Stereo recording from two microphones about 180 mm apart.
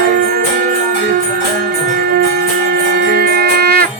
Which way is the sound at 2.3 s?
60° right (ahead or behind).